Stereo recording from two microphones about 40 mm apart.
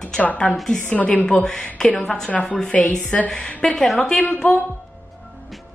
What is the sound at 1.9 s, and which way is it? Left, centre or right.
A woman's voice, left.